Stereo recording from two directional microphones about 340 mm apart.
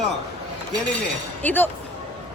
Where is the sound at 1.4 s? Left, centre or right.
Centre.